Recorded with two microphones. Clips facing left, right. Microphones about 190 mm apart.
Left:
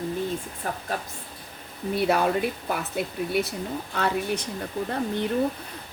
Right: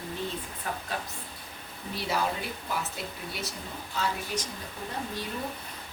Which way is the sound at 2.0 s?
60° left (ahead or behind).